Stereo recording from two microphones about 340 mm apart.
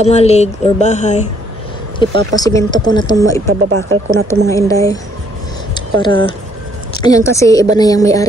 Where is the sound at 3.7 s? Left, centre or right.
Right.